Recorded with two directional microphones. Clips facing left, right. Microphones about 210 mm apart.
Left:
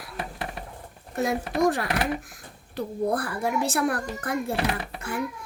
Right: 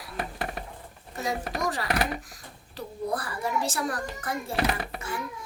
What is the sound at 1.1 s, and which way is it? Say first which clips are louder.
Speech: left 5 dB; 55° left (ahead or behind).